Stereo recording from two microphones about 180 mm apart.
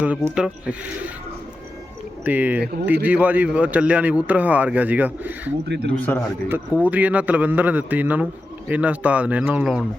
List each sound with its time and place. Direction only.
0.3 s a man's voice: 5° right (ahead or behind)
2.2 s a man's voice: 10° right (ahead or behind)
5.6 s a man's voice: 70° right (ahead or behind)
6.0 s a man's voice: 10° left (ahead or behind)
6.5 s a man's voice: 10° right (ahead or behind)